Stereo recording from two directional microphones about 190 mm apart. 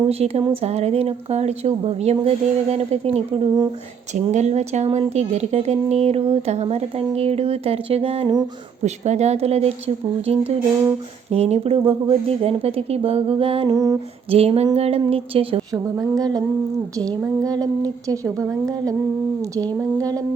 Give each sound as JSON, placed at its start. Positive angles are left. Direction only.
{"t": 0.0, "sound": "speech", "side_deg": -30}
{"t": 8.8, "sound": "speech", "side_deg": -35}
{"t": 14.3, "sound": "speech", "side_deg": -30}
{"t": 16.0, "sound": "a sound", "side_deg": -20}
{"t": 18.1, "sound": "a woman's voice", "side_deg": -15}
{"t": 20.0, "sound": "a sound", "side_deg": -20}